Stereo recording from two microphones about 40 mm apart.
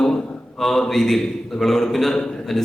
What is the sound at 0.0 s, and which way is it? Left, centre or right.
A man's voice, centre.